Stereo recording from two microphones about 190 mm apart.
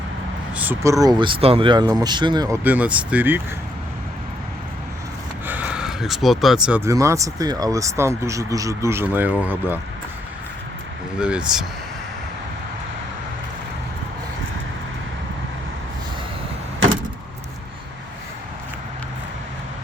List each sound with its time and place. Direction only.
0.5 s speech: 10° right (ahead or behind)
2.6 s speech: 10° right (ahead or behind)
5.5 s speech: 10° right (ahead or behind)
11.2 s speech: 5° right (ahead or behind)